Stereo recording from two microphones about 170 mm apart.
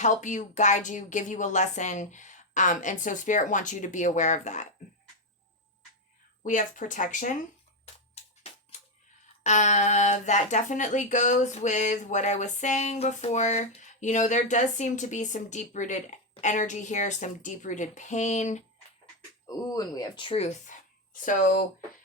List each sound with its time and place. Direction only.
0.0 s speech: 50° left (ahead or behind)
6.4 s speech: 50° left (ahead or behind)
8.2 s music: 35° left (ahead or behind)
9.4 s speech: 45° left (ahead or behind)
19.5 s a woman's voice: 20° left (ahead or behind); by 21.8 s 50° left (ahead or behind)